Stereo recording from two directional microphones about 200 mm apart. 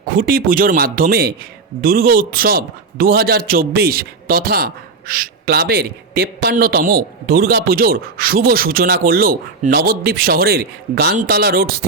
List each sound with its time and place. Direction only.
0.0 s a man's voice: 45° right (ahead or behind)